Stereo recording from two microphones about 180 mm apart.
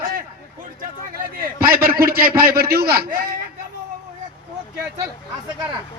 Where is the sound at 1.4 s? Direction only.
55° right (ahead or behind).